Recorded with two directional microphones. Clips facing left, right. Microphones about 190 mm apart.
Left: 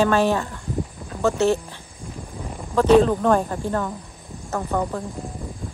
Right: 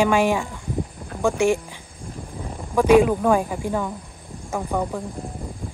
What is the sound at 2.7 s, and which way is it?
Speech, 10° right (ahead or behind).